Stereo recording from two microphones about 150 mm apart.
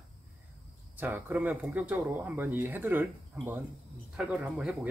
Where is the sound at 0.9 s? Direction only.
10° right (ahead or behind).